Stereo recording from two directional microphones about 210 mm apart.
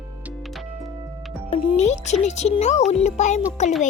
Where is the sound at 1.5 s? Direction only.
35° left (ahead or behind).